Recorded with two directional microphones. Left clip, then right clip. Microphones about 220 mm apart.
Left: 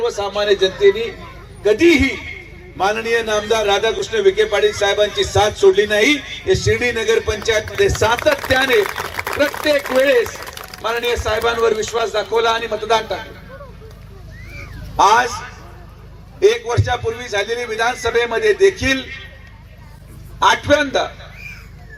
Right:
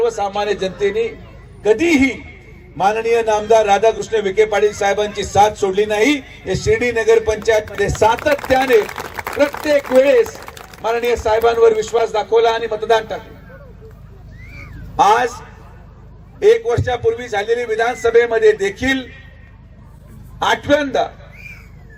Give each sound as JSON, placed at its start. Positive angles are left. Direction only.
{"t": 0.0, "sound": "a man's voice", "side_deg": -45}
{"t": 14.5, "sound": "cat", "side_deg": -50}
{"t": 16.4, "sound": "a man's voice", "side_deg": -50}
{"t": 20.4, "sound": "a man's voice", "side_deg": -50}